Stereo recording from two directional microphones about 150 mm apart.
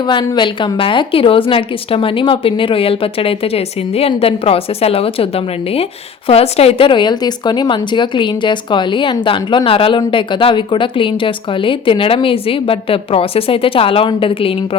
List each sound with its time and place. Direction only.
0.0 s a woman's voice: 30° left (ahead or behind)